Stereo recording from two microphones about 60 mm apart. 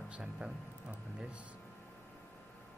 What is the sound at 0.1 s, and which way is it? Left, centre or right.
Speech, centre.